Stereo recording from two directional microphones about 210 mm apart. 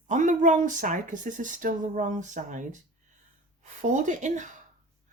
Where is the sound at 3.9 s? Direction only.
35° right (ahead or behind).